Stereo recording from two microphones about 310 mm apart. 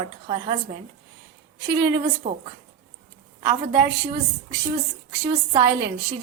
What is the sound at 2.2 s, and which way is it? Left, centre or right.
Speech, centre.